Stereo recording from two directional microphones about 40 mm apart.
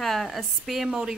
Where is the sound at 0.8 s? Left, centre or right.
Centre.